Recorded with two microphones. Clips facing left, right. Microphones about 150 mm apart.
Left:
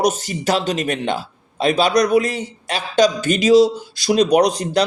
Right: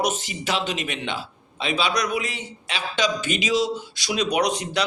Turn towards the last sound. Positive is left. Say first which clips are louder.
# left 8 dB
turn(degrees=35)  # may be behind; listen again after turning